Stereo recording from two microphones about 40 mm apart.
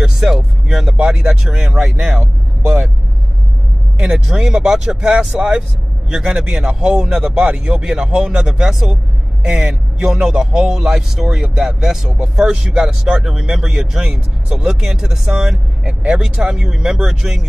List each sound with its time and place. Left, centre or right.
0.0 s a man's voice: centre
4.0 s a man's voice: centre